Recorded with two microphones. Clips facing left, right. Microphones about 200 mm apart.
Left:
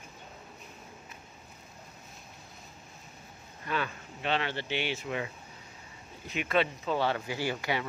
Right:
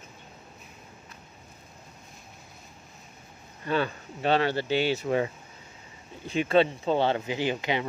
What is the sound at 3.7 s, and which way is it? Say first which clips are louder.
Speech: right 6 dB; 35° right (ahead or behind).